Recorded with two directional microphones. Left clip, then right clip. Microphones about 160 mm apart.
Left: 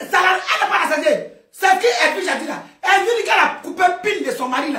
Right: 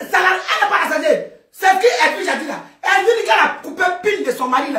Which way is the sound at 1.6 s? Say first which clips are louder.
Right 2 dB; 15° left (ahead or behind).